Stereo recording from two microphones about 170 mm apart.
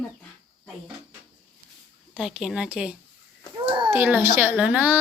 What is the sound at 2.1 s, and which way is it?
Speech, 5° right (ahead or behind).